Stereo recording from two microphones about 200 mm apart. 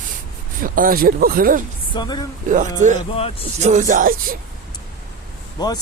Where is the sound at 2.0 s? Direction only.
20° left (ahead or behind).